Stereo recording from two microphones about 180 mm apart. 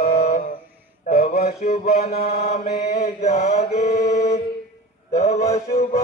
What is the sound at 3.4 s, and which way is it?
Mantra, 40° left (ahead or behind).